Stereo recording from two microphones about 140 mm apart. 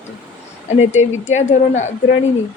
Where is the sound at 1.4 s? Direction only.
55° left (ahead or behind).